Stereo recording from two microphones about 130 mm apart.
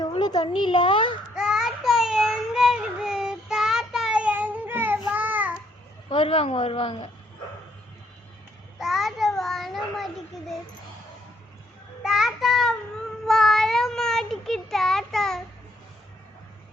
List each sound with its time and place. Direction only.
0.1 s a child's voice: 35° left (ahead or behind)
1.4 s child singing: 5° right (ahead or behind)
6.1 s speech: 45° left (ahead or behind)
8.8 s child singing: centre (ahead or behind)
12.0 s child singing: 5° right (ahead or behind)